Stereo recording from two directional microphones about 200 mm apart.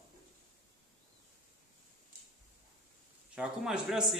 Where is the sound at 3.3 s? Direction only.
5° right (ahead or behind).